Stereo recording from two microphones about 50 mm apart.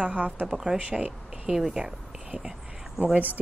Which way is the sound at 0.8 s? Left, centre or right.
Right.